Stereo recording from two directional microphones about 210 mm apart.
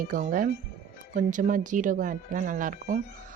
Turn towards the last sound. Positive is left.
turn(degrees=-40)  # may be behind; listen again after turning